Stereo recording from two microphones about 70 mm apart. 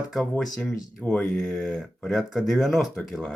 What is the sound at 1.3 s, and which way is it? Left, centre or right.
Speech, centre.